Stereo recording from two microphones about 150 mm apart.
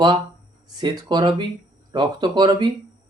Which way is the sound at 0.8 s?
30° right (ahead or behind).